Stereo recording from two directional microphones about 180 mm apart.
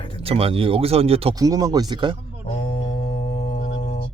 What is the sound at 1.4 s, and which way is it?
Speech, 20° right (ahead or behind).